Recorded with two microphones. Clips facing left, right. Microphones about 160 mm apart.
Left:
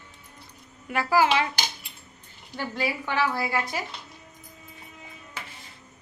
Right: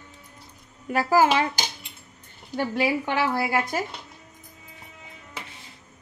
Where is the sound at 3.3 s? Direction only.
45° right (ahead or behind).